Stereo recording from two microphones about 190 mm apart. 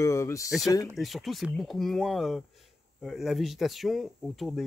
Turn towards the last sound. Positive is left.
turn(degrees=0)  # may be behind; listen again after turning